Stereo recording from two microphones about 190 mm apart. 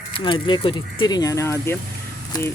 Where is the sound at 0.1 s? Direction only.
25° left (ahead or behind).